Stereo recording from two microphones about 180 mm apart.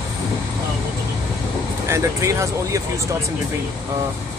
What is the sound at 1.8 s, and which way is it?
Speech, 15° right (ahead or behind).